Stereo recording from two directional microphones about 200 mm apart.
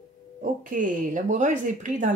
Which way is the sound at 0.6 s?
40° right (ahead or behind).